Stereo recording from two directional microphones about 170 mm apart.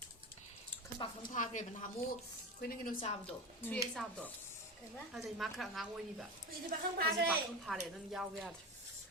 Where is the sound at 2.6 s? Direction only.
60° left (ahead or behind).